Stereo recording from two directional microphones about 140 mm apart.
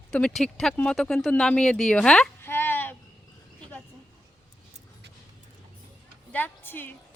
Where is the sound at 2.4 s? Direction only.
15° left (ahead or behind).